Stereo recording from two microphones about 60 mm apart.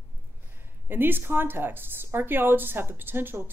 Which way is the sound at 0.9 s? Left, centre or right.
Right.